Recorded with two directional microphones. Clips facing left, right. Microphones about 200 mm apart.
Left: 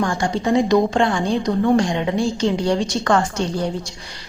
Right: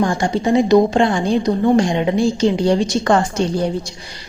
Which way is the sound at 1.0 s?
20° right (ahead or behind).